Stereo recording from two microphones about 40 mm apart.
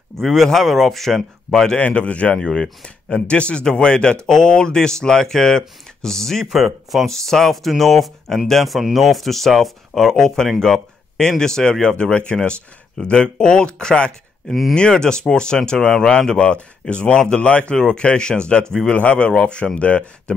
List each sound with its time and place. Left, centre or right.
0.2 s speech: centre
1.5 s speech: centre
1.8 s speech: left
2.3 s speech: centre
6.4 s speech: centre
7.1 s speech: centre; by 20.3 s left